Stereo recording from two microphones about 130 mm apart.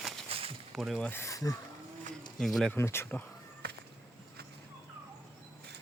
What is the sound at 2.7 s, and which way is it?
Speech, 20° left (ahead or behind).